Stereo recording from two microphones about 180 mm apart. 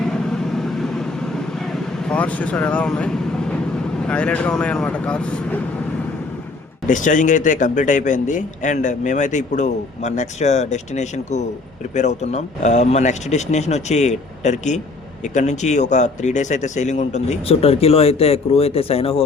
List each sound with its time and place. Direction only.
0.0 s vehicle: 5° left (ahead or behind)
4.0 s speech: 5° left (ahead or behind)
6.8 s a man's voice: 45° left (ahead or behind)